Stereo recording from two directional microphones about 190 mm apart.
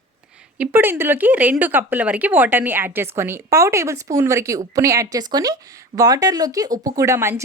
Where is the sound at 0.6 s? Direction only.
10° right (ahead or behind).